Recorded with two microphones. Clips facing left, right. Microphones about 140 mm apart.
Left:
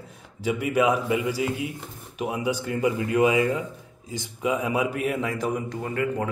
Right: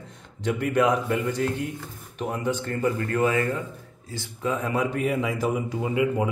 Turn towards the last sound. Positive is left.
turn(degrees=-10)  # may be behind; listen again after turning